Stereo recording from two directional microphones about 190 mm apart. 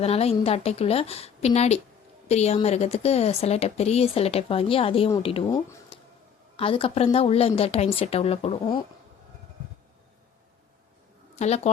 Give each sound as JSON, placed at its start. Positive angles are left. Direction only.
{"t": 0.0, "sound": "a woman's voice", "side_deg": 30}
{"t": 5.5, "sound": "speech", "side_deg": 20}
{"t": 6.6, "sound": "speech", "side_deg": 30}
{"t": 11.3, "sound": "speech", "side_deg": 35}